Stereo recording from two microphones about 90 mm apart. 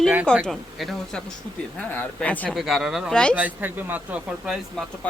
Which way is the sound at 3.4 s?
20° right (ahead or behind).